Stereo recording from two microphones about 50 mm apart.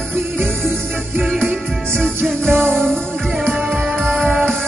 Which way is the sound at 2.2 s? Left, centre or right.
Right.